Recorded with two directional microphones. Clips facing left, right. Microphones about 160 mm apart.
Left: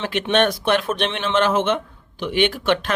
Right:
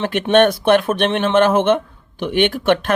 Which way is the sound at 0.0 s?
50° right (ahead or behind).